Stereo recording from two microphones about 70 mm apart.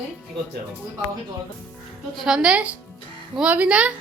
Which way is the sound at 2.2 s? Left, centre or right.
Centre.